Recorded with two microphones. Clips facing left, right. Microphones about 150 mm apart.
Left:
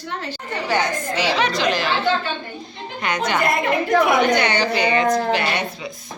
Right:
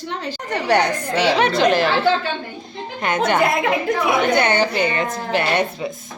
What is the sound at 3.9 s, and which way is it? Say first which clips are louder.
Speech: left 5 dB; 75° left (ahead or behind).